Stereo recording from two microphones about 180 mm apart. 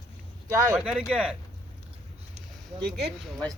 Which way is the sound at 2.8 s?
65° right (ahead or behind).